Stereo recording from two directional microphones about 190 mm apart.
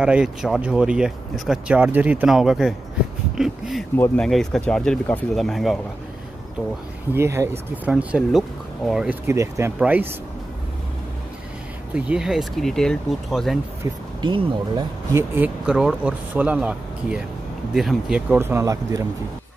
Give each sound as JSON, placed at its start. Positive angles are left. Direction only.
{"t": 0.0, "sound": "speech", "side_deg": -5}
{"t": 3.9, "sound": "speech", "side_deg": 10}
{"t": 7.2, "sound": "speech", "side_deg": -15}
{"t": 11.9, "sound": "speech", "side_deg": -5}
{"t": 14.2, "sound": "speech", "side_deg": -25}
{"t": 15.3, "sound": "speech", "side_deg": -5}